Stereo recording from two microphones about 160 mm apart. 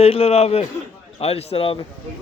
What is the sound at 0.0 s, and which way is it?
A man's voice, 40° left (ahead or behind).